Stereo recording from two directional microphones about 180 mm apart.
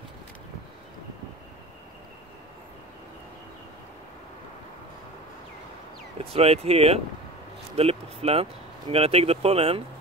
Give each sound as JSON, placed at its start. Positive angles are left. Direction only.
{"t": 6.2, "sound": "speech", "side_deg": -35}